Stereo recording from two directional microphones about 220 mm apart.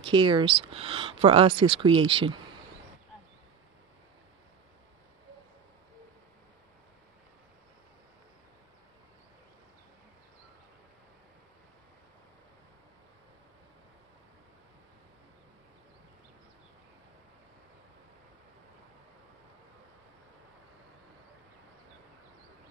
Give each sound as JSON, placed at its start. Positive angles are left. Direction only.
{"t": 0.0, "sound": "speech", "side_deg": -20}